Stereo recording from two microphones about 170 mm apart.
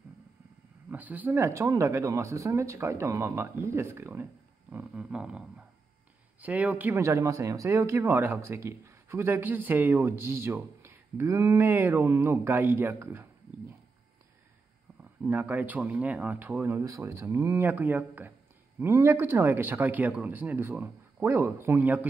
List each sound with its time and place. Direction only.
0.8 s speech: 10° right (ahead or behind)
6.4 s speech: 10° right (ahead or behind)
15.2 s speech: 10° right (ahead or behind)